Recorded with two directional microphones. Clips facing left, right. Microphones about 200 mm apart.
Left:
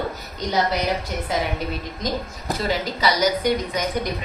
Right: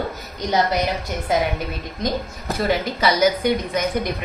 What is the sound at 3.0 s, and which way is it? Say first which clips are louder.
A woman's voice: right 2 dB; 55° right (ahead or behind).